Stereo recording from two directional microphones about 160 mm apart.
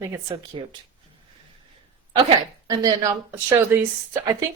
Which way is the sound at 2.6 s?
20° right (ahead or behind).